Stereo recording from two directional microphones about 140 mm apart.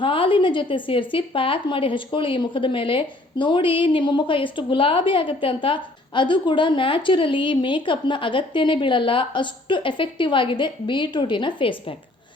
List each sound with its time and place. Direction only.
0.0 s a woman's voice: 40° left (ahead or behind)